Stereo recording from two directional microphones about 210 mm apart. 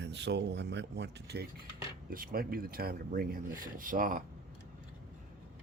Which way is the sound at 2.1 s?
45° right (ahead or behind).